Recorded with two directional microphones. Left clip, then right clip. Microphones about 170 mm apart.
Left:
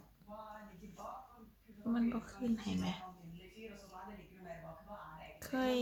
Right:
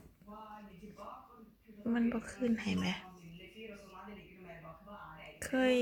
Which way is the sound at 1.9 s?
20° right (ahead or behind).